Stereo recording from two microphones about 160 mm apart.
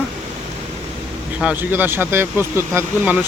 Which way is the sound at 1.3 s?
10° right (ahead or behind).